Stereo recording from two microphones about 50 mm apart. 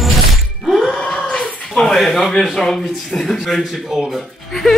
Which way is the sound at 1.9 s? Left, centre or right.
Centre.